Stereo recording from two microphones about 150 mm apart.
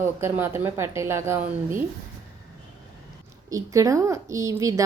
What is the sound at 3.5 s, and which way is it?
A woman's voice, 20° right (ahead or behind).